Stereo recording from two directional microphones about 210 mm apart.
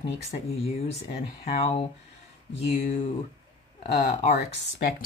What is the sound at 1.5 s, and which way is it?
Speech, 25° left (ahead or behind).